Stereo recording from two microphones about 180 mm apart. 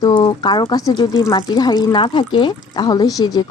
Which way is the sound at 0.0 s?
25° left (ahead or behind).